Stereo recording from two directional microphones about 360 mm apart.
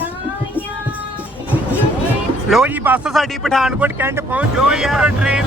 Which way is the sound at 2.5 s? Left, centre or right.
Centre.